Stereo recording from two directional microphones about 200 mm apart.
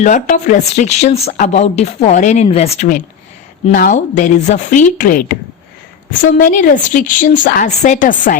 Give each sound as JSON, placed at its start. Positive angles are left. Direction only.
{"t": 0.0, "sound": "speech", "side_deg": 40}